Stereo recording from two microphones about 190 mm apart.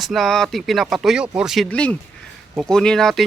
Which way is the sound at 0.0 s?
Centre (ahead or behind).